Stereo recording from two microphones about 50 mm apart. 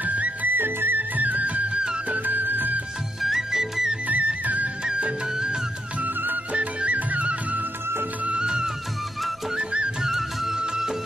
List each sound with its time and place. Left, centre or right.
0.0 s music: right
0.6 s music: right
3.2 s music: centre
4.1 s music: right
5.3 s music: centre
5.9 s music: right
8.3 s music: centre
10.0 s music: centre